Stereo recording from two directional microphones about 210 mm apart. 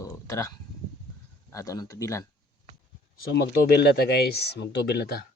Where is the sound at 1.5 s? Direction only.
15° left (ahead or behind).